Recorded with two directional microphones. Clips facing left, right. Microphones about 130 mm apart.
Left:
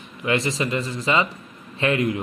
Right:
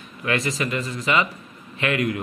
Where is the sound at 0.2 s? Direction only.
25° left (ahead or behind).